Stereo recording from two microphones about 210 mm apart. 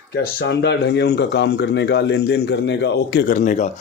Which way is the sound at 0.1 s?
50° left (ahead or behind).